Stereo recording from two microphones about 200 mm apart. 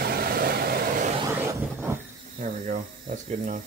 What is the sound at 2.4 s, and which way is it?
Speech, 40° right (ahead or behind).